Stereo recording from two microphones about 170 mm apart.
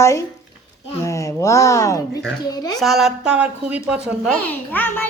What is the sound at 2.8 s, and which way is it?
A woman's voice, centre (ahead or behind).